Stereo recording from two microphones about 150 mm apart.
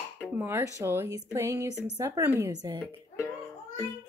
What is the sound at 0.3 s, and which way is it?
Speech, 15° right (ahead or behind).